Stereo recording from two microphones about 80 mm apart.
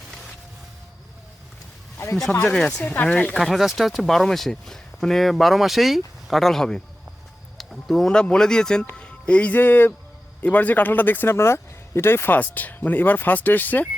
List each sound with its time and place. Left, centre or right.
2.5 s speech: centre
2.8 s speech: left
3.3 s speech: centre; by 13.8 s left